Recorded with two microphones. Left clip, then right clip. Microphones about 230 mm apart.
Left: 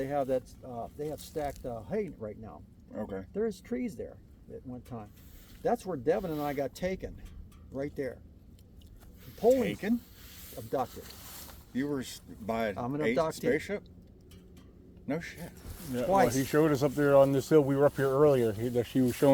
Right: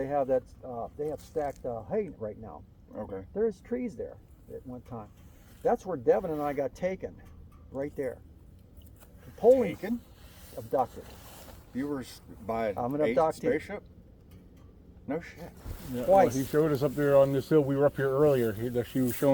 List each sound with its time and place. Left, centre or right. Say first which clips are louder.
0.0 s speech: right 3 dB; left
1.7 s speech: right 3 dB; left
7.7 s speech: right 2 dB; left
9.4 s speech: right 4 dB; left
15.0 s speech: right 1 dB; left
15.9 s speech: left 2 dB; centre
16.3 s speech: even; centre